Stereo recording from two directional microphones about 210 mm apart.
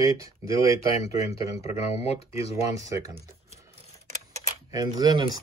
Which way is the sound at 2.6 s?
15° right (ahead or behind).